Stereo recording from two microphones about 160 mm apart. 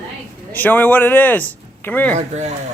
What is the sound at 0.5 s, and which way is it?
Speech, 10° left (ahead or behind).